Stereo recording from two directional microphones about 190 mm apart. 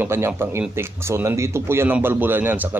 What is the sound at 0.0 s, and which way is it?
A man's voice, 10° right (ahead or behind).